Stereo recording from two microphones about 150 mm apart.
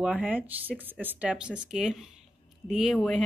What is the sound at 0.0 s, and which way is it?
Speech, 5° right (ahead or behind).